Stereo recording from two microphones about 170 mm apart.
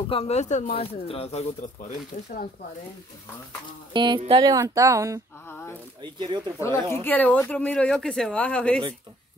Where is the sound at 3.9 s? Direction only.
25° right (ahead or behind).